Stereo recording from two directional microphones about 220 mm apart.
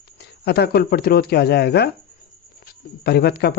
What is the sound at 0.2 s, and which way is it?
Speech, 50° left (ahead or behind).